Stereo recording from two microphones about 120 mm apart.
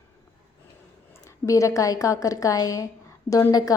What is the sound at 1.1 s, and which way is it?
A woman's voice, 25° left (ahead or behind).